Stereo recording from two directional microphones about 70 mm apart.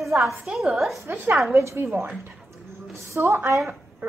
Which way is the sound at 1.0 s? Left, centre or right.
Right.